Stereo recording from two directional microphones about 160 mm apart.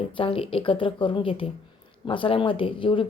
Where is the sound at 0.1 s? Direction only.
35° left (ahead or behind).